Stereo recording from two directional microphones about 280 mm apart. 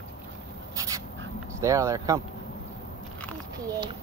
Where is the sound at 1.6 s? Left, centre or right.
Centre.